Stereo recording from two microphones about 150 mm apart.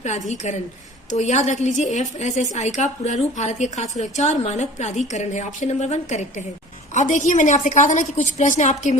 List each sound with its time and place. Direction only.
0.0 s a woman's voice: 50° left (ahead or behind)